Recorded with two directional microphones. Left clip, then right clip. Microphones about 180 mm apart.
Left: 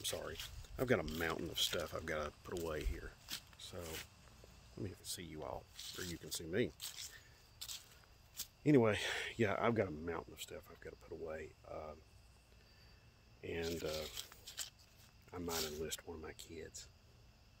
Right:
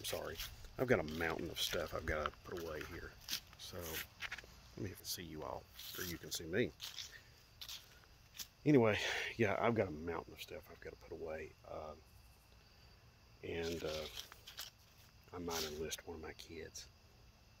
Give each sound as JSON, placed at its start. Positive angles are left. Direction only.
{"t": 0.0, "sound": "speech", "side_deg": -5}
{"t": 3.0, "sound": "speech", "side_deg": 10}
{"t": 13.4, "sound": "speech", "side_deg": 5}
{"t": 13.7, "sound": "speech", "side_deg": 20}
{"t": 15.3, "sound": "speech", "side_deg": 15}
{"t": 15.8, "sound": "speech", "side_deg": 5}